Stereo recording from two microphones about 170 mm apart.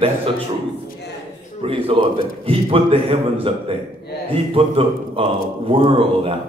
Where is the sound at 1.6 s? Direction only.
35° right (ahead or behind).